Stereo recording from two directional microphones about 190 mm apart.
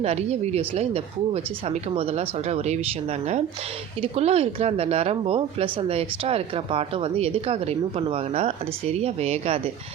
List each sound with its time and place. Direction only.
0.0 s speech: 35° right (ahead or behind)
4.0 s speech: 35° right (ahead or behind)